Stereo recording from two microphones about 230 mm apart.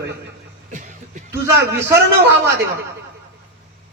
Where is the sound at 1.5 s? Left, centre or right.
Right.